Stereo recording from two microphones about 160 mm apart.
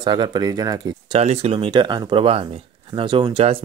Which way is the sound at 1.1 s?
40° right (ahead or behind).